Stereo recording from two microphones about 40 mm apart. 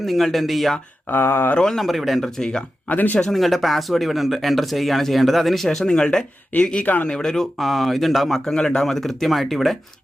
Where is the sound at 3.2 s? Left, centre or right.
Centre.